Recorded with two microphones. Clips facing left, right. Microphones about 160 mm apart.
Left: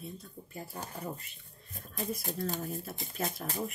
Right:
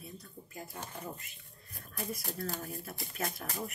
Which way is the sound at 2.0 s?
20° left (ahead or behind).